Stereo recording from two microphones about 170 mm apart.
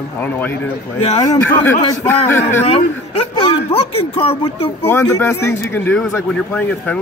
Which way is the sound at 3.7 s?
35° left (ahead or behind).